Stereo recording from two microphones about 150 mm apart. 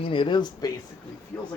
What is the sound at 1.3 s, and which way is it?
Speech, 15° left (ahead or behind).